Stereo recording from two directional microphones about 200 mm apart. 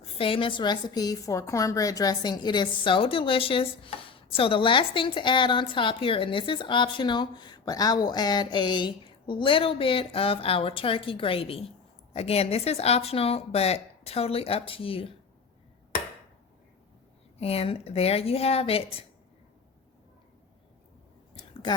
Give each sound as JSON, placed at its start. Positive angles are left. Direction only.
{"t": 0.0, "sound": "a woman's voice", "side_deg": 25}
{"t": 17.3, "sound": "a woman's voice", "side_deg": 30}
{"t": 21.3, "sound": "a sound", "side_deg": 25}